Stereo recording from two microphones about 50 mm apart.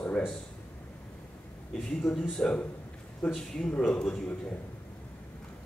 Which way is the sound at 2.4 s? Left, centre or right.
Centre.